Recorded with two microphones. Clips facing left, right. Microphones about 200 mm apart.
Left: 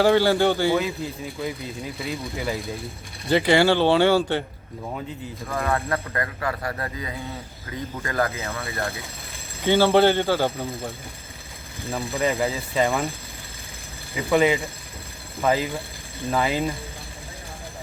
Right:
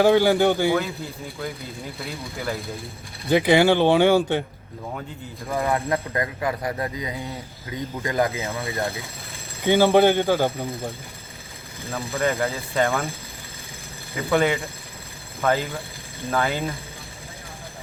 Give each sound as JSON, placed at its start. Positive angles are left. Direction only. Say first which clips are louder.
{"t": 0.0, "sound": "speech", "louder": "right 1 dB", "side_deg": -15}
{"t": 0.8, "sound": "speech", "louder": "left 2 dB", "side_deg": 0}
{"t": 3.2, "sound": "speech", "louder": "right 1 dB", "side_deg": -15}
{"t": 5.5, "sound": "speech", "louder": "right 2 dB", "side_deg": -15}
{"t": 11.9, "sound": "speech", "louder": "left 1 dB", "side_deg": 15}
{"t": 12.2, "sound": "speech", "louder": "even", "side_deg": 0}
{"t": 14.2, "sound": "speech", "louder": "left 1 dB", "side_deg": 0}